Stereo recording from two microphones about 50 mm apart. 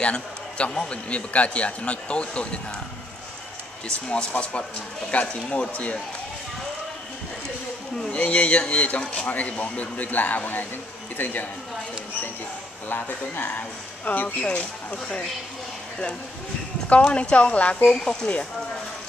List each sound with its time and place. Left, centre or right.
0.0 s a man's voice: left
3.8 s speech: centre
8.1 s speech: left
12.9 s speech: left
16.9 s speech: left